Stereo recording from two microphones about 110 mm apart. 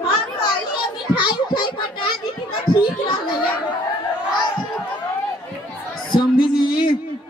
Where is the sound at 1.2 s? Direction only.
45° left (ahead or behind).